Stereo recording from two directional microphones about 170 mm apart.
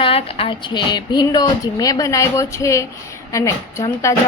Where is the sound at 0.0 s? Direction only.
35° left (ahead or behind).